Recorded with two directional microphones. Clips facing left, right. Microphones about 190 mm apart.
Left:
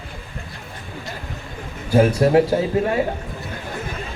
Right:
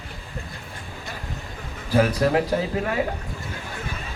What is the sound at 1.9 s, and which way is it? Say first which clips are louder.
A man's voice: left 4 dB; 25° left (ahead or behind).